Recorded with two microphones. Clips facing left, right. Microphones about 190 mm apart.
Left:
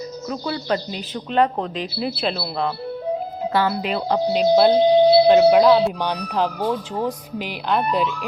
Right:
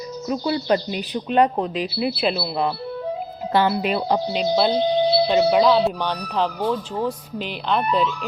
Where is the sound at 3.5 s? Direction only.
25° right (ahead or behind).